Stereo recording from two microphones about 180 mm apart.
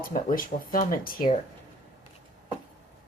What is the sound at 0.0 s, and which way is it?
Speech, 50° left (ahead or behind).